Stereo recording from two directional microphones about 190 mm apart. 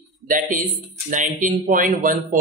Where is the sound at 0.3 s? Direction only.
45° right (ahead or behind).